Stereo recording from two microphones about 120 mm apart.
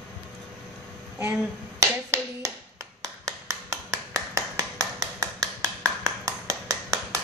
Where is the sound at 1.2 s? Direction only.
25° right (ahead or behind).